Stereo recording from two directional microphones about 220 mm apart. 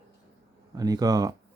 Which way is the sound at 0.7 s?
15° right (ahead or behind).